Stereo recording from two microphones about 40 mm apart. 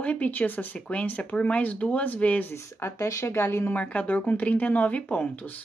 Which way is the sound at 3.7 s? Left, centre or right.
Left.